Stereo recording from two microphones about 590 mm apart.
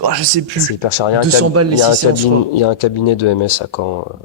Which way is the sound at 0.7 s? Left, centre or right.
Left.